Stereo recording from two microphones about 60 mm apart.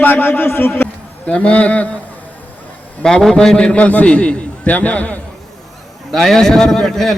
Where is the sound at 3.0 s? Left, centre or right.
Centre.